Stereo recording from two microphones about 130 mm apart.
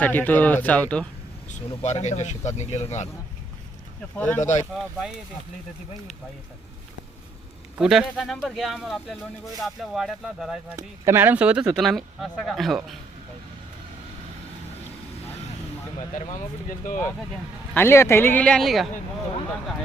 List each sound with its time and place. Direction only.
0.0 s speech: 15° left (ahead or behind)
1.5 s speech: 60° left (ahead or behind)
4.4 s speech: 70° left (ahead or behind)
4.7 s speech: centre (ahead or behind)
7.8 s speech: 5° right (ahead or behind)
10.8 s speech: 20° right (ahead or behind)
11.7 s speech: centre (ahead or behind)
16.1 s speech: 80° left
17.7 s speech: 20° left (ahead or behind); by 18.9 s centre (ahead or behind)